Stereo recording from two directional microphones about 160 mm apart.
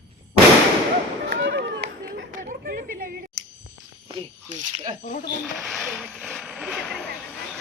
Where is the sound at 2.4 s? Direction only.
60° right (ahead or behind).